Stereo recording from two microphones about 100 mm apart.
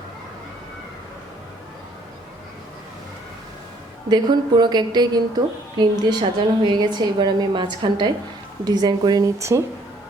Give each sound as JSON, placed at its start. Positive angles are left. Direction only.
{"t": 4.1, "sound": "a woman's voice", "side_deg": -45}